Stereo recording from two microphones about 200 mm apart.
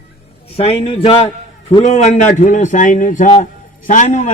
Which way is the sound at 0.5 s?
25° left (ahead or behind).